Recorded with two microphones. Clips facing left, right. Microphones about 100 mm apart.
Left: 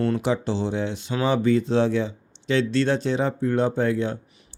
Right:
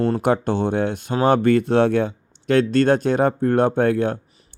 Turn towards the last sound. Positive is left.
turn(degrees=-55)  # may be behind; listen again after turning